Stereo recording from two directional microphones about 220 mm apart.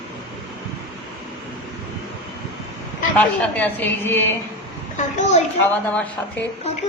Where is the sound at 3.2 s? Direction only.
5° left (ahead or behind).